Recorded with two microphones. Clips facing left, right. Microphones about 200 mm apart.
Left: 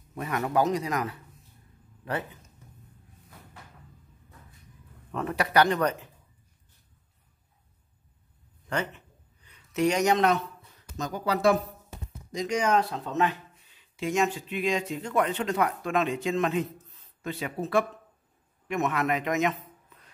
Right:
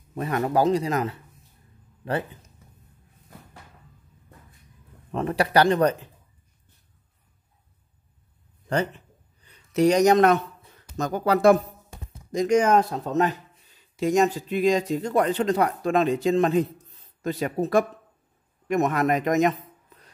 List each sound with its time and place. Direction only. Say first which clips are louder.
0.1 s a man's voice: right 4 dB; 30° right (ahead or behind)
5.1 s speech: right 4 dB; 30° right (ahead or behind)
8.6 s a man's voice: right 6 dB; 35° right (ahead or behind)